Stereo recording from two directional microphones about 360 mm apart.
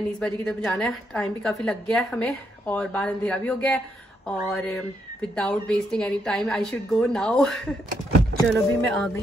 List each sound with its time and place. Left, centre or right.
0.2 s a woman's voice: centre